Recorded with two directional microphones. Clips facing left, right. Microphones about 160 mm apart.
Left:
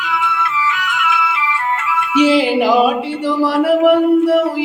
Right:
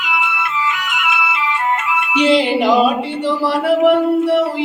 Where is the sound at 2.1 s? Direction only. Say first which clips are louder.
Left 2 dB; 10° left (ahead or behind).